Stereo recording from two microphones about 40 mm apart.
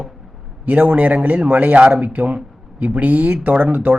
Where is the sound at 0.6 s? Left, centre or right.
Right.